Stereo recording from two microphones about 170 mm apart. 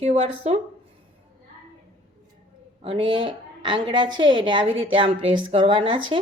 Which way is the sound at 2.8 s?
30° right (ahead or behind).